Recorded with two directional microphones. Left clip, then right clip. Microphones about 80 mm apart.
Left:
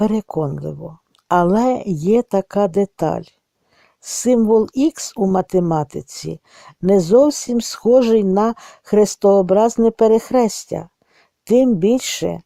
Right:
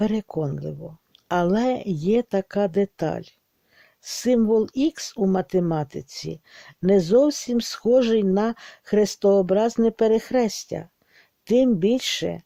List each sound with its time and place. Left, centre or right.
0.0 s speech: left
0.7 s speech: left
5.8 s speech: left